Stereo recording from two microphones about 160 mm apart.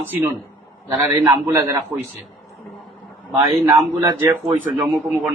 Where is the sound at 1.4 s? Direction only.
15° right (ahead or behind).